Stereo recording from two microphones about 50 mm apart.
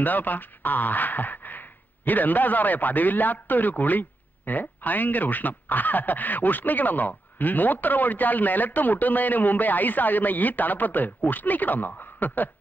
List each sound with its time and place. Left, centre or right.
0.0 s speech: left